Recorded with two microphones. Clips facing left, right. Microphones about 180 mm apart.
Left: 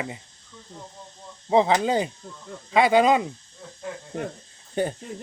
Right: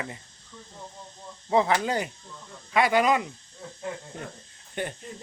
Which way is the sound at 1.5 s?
20° left (ahead or behind).